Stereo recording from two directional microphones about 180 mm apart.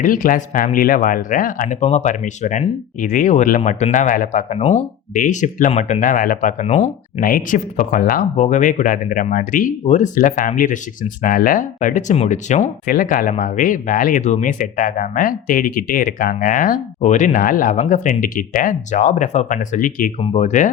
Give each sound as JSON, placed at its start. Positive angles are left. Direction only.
{"t": 0.0, "sound": "speech", "side_deg": 50}
{"t": 3.6, "sound": "speech", "side_deg": 35}
{"t": 7.2, "sound": "speech", "side_deg": 55}
{"t": 11.8, "sound": "speech", "side_deg": 40}
{"t": 20.1, "sound": "speech", "side_deg": 35}